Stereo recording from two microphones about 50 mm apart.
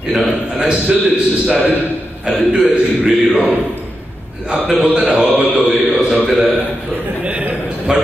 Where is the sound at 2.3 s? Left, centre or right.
Centre.